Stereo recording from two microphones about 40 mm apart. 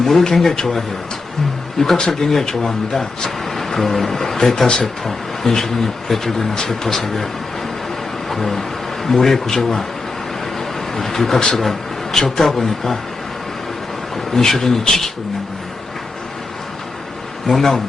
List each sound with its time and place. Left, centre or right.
0.0 s speech: centre
2.0 s speech: centre
6.5 s speech: centre
8.3 s a sound: centre
9.0 s speech: centre
10.9 s speech: centre
14.3 s speech: centre
17.4 s speech: centre